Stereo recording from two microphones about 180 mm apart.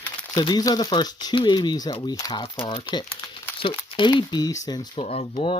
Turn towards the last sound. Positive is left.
turn(degrees=30)  # may be behind; listen again after turning